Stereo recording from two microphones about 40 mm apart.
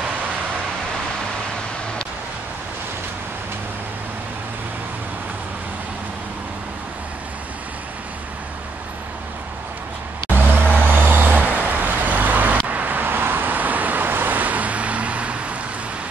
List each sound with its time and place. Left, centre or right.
10.3 s vehicle: right